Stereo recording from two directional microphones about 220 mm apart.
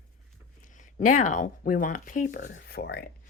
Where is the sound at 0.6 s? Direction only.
35° left (ahead or behind).